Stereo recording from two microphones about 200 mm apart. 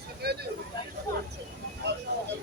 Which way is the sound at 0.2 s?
50° right (ahead or behind).